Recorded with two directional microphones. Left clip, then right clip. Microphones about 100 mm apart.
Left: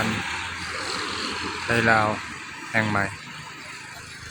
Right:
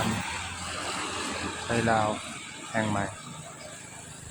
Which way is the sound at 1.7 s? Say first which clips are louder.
Left 6 dB; 10° left (ahead or behind).